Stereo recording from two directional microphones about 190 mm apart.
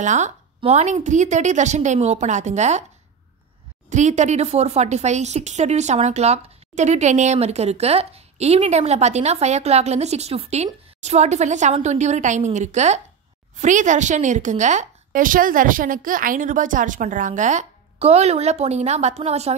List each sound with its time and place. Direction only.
0.0 s a woman's voice: 40° right (ahead or behind)
3.9 s a woman's voice: 40° right (ahead or behind)